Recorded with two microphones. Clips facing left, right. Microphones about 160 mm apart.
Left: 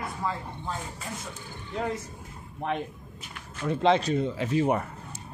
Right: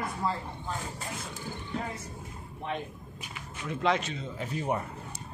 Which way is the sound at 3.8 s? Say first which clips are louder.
Left 5 dB; 30° left (ahead or behind).